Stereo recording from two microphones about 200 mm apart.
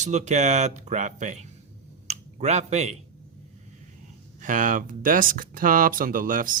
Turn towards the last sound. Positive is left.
turn(degrees=-40)  # may be behind; listen again after turning